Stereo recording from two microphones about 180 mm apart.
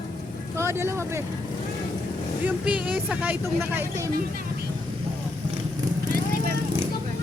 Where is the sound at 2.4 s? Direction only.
5° right (ahead or behind).